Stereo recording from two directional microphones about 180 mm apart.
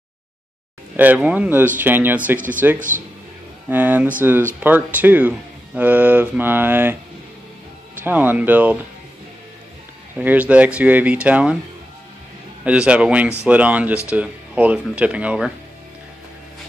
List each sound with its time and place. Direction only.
0.9 s speech: 10° right (ahead or behind)
2.3 s speech: 50° right (ahead or behind)
3.6 s speech: 10° right (ahead or behind)
8.0 s speech: 10° right (ahead or behind)
10.1 s speech: 10° right (ahead or behind)
12.6 s speech: 5° right (ahead or behind)